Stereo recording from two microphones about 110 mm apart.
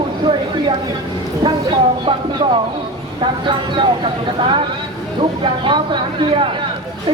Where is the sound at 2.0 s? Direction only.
50° right (ahead or behind).